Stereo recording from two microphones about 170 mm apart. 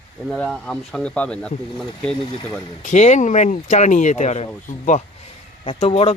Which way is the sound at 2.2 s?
30° left (ahead or behind).